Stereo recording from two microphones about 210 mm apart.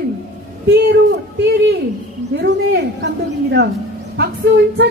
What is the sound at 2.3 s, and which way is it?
A man's voice, 55° right (ahead or behind).